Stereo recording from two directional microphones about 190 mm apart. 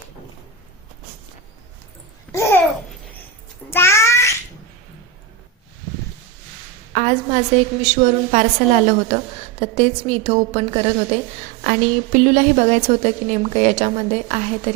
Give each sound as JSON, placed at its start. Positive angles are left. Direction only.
{"t": 2.3, "sound": "babbling", "side_deg": 15}
{"t": 3.7, "sound": "cat", "side_deg": 15}
{"t": 6.9, "sound": "a woman's voice", "side_deg": -40}
{"t": 11.6, "sound": "a woman's voice", "side_deg": -45}